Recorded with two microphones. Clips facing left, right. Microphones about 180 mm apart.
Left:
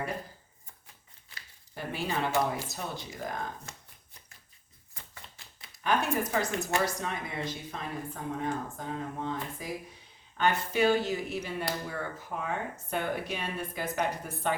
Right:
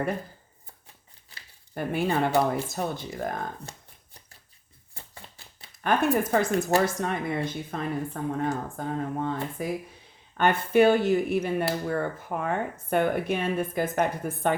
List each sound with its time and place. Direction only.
1.7 s speech: 55° right (ahead or behind)
4.9 s a sound: 30° right (ahead or behind)
5.8 s speech: 55° right (ahead or behind)
6.6 s speech: 45° right (ahead or behind)